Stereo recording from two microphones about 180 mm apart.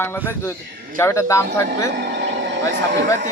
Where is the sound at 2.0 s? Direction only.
70° right (ahead or behind).